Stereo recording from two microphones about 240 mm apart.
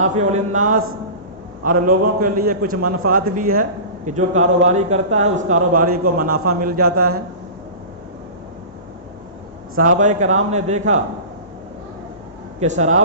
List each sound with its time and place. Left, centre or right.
0.0 s a man's voice: right
10.0 s a man's voice: right
12.5 s a man's voice: right